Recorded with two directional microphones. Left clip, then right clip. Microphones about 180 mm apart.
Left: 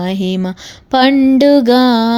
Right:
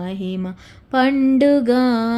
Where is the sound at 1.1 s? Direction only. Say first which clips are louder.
Left 6 dB; 15° left (ahead or behind).